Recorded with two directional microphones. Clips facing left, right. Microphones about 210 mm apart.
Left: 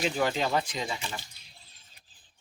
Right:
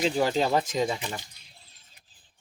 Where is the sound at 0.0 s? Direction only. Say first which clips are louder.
Right 4 dB; 30° right (ahead or behind).